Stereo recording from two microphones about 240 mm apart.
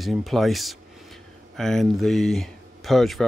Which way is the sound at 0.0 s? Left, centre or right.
Centre.